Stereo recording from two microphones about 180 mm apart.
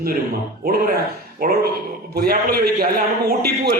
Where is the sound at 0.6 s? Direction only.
55° right (ahead or behind).